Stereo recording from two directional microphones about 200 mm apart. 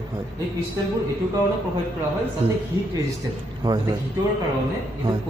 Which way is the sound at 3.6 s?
20° right (ahead or behind).